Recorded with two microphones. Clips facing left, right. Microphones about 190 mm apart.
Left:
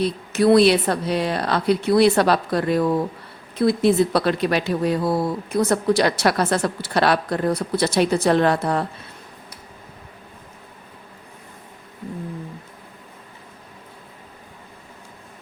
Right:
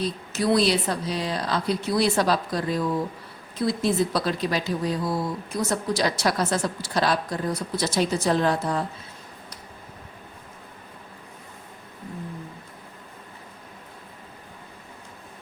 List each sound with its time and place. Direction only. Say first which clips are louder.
0.0 s speech: left 7 dB; 60° left (ahead or behind)